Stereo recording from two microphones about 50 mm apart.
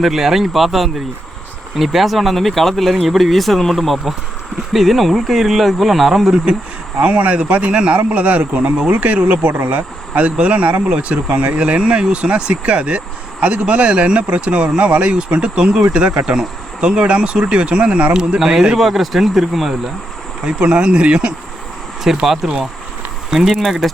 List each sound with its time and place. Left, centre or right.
0.0 s speech: centre
7.0 s speech: right; by 19.7 s centre
20.4 s speech: right
22.0 s speech: centre